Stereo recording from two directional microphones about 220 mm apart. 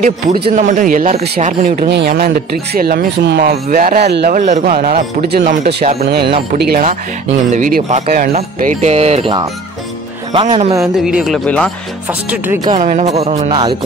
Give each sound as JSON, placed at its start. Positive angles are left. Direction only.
{"t": 0.5, "sound": "speech", "side_deg": -35}
{"t": 6.0, "sound": "speech", "side_deg": -45}
{"t": 11.0, "sound": "speech", "side_deg": 0}
{"t": 12.8, "sound": "speech", "side_deg": -30}